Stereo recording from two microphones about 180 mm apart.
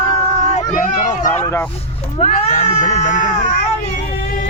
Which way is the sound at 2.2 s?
40° left (ahead or behind).